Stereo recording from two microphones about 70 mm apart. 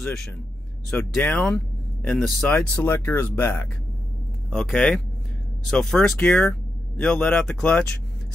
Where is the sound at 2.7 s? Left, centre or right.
Left.